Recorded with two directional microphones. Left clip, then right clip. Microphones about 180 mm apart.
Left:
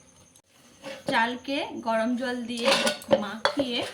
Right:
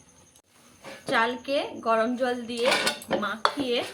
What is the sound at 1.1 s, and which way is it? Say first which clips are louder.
A woman's voice: right 1 dB; 25° right (ahead or behind).